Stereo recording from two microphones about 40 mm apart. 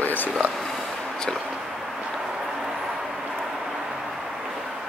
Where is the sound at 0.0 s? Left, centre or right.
Left.